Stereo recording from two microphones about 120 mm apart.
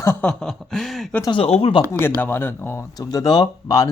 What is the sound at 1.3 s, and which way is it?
Speech, 50° left (ahead or behind).